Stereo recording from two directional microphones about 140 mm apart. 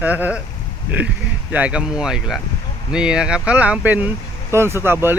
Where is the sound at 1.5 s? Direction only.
10° right (ahead or behind).